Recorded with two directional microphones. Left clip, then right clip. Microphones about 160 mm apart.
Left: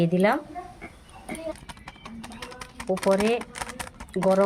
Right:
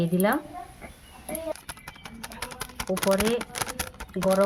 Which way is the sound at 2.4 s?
60° right (ahead or behind).